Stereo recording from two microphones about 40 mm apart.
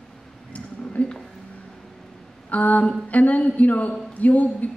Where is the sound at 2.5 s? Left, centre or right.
Left.